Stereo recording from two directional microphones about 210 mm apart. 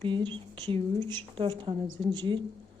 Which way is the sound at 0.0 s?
20° right (ahead or behind).